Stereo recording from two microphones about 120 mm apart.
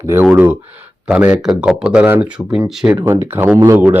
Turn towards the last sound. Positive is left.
turn(degrees=-25)  # may be behind; listen again after turning